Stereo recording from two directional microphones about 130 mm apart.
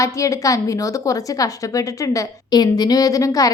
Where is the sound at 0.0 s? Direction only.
25° left (ahead or behind).